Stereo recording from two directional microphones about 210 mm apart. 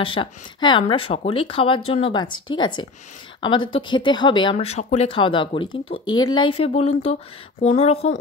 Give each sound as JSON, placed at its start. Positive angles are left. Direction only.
{"t": 0.0, "sound": "speech", "side_deg": 25}